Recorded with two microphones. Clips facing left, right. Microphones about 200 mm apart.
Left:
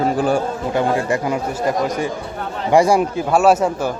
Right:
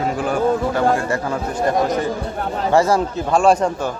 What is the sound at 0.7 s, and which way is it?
A man's voice, 15° left (ahead or behind).